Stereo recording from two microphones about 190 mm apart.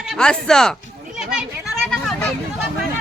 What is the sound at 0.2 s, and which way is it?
Speech, 5° left (ahead or behind).